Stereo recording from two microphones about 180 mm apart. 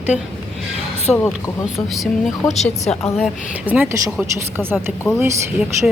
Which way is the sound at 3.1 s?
5° right (ahead or behind).